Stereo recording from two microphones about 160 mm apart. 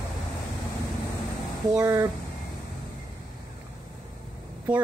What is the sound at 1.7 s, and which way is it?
Speech, 20° right (ahead or behind).